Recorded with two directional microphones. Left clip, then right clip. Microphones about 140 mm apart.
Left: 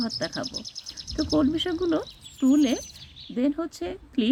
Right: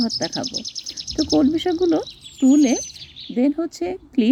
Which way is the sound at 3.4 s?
30° right (ahead or behind).